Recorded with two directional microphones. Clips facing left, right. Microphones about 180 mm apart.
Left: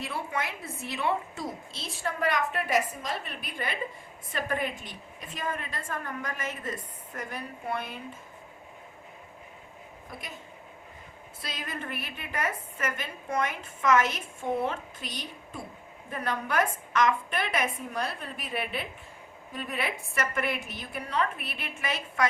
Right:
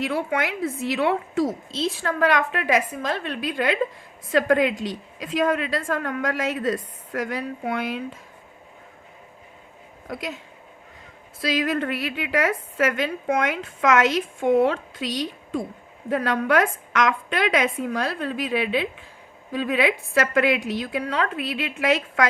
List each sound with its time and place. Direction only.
0.0 s a woman's voice: 90° right
10.1 s speech: 90° right
11.3 s a woman's voice: 90° right